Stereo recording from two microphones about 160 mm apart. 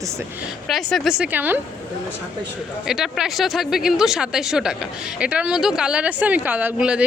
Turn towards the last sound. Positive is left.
turn(degrees=-10)  # may be behind; listen again after turning